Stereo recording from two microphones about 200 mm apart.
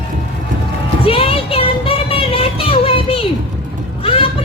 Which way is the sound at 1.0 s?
30° left (ahead or behind).